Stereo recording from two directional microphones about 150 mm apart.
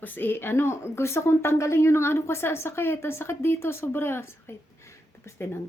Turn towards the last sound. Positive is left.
turn(degrees=15)  # may be behind; listen again after turning